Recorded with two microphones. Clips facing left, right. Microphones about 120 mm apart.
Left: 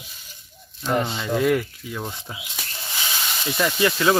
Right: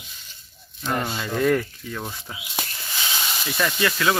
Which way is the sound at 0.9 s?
20° left (ahead or behind).